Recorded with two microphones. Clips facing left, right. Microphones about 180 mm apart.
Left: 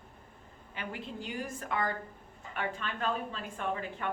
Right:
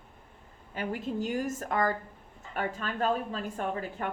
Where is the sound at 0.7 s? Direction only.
45° right (ahead or behind).